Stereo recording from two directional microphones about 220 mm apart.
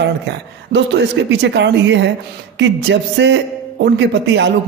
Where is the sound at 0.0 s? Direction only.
55° right (ahead or behind).